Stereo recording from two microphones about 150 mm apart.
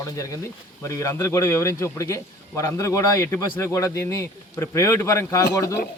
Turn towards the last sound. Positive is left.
turn(degrees=20)  # may be behind; listen again after turning